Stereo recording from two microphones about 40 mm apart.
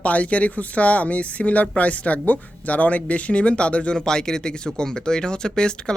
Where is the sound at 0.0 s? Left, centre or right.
Left.